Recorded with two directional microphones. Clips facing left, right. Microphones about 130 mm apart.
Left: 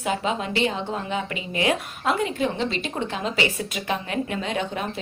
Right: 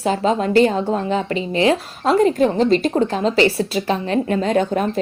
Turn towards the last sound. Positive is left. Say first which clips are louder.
# right 9 dB
turn(degrees=-40)  # may be behind; listen again after turning